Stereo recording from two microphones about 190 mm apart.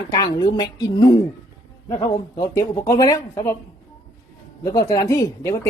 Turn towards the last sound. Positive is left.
turn(degrees=15)  # may be behind; listen again after turning